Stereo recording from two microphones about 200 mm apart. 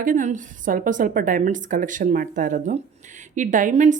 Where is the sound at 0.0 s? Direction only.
40° right (ahead or behind).